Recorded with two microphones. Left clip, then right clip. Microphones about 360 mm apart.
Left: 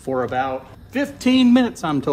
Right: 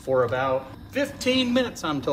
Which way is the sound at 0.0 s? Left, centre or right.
Left.